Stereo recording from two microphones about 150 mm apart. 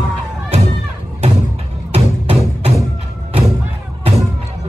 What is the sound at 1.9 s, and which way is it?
Music, 40° right (ahead or behind).